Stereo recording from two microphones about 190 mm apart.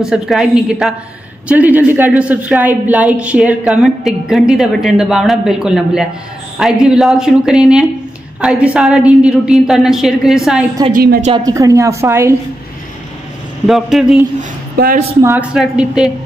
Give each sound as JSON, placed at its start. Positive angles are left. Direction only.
{"t": 0.0, "sound": "a woman's voice", "side_deg": 0}
{"t": 11.0, "sound": "a woman's voice", "side_deg": -50}
{"t": 11.3, "sound": "a woman's voice", "side_deg": -20}
{"t": 13.7, "sound": "a woman's voice", "side_deg": 0}
{"t": 15.2, "sound": "a woman's voice", "side_deg": -5}